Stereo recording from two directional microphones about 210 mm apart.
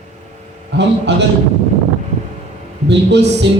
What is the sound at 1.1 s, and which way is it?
Speech, 55° right (ahead or behind).